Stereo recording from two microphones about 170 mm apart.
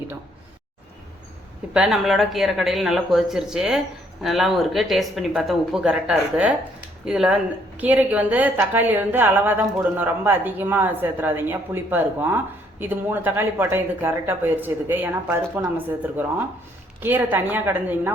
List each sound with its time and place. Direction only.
1.7 s a woman's voice: 5° right (ahead or behind)